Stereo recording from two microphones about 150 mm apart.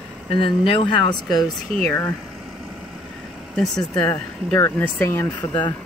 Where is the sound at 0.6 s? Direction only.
35° left (ahead or behind).